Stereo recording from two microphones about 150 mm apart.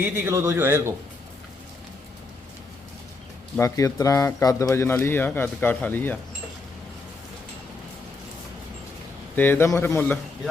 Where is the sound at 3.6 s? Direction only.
20° left (ahead or behind).